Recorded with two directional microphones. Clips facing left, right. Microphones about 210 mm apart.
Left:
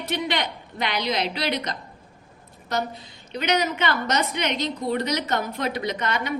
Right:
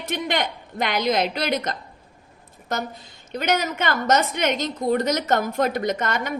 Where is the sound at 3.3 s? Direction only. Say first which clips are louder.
Even; 50° right (ahead or behind).